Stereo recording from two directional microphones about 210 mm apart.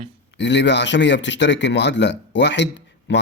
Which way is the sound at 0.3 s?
55° left (ahead or behind).